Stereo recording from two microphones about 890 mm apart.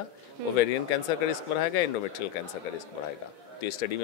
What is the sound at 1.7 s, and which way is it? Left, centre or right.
Speech, left.